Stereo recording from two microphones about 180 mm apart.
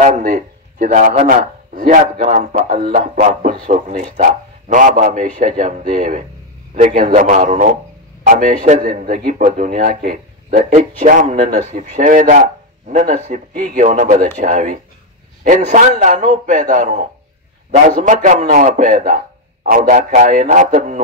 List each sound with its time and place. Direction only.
0.0 s a man's voice: 45° right (ahead or behind)